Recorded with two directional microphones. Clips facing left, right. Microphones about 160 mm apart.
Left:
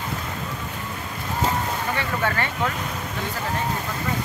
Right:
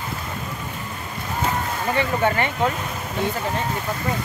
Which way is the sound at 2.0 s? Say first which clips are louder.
Right 7 dB; 20° right (ahead or behind).